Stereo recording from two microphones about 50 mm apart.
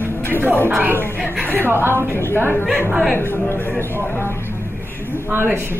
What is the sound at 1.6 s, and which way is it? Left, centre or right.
Speech, right.